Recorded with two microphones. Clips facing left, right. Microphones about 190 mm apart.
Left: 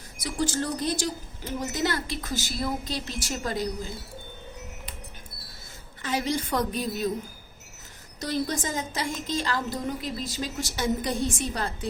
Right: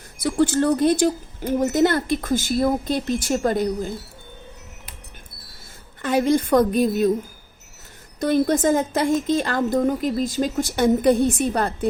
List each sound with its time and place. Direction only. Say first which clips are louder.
0.2 s speech: right 9 dB; 60° right (ahead or behind)
6.0 s speech: right 9 dB; 55° right (ahead or behind)
8.2 s a woman's voice: right 10 dB; 55° right (ahead or behind)